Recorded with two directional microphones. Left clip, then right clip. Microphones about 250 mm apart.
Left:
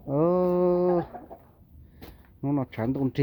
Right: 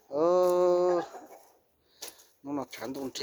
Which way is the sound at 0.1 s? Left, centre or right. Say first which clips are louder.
Left 1 dB; centre.